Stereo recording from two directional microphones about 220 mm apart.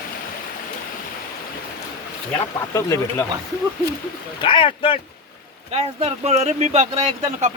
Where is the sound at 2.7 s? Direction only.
10° left (ahead or behind).